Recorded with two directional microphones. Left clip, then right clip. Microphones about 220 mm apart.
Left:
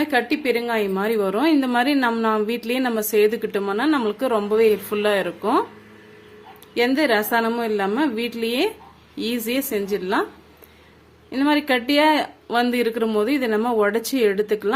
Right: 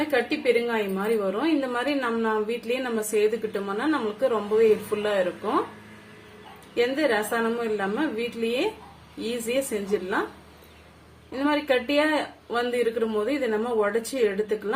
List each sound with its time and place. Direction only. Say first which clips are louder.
0.1 s a woman's voice: left 2 dB; 50° left (ahead or behind)
6.7 s a woman's voice: left 4 dB; 45° left (ahead or behind)
11.3 s a woman's voice: left 4 dB; 45° left (ahead or behind)